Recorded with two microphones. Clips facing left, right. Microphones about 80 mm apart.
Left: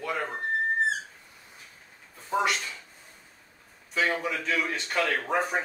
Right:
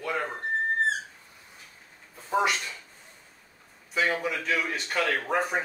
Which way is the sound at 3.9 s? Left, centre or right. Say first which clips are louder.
Even; centre.